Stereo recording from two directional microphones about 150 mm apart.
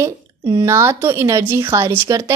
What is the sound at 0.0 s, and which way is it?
A woman's voice, 20° right (ahead or behind).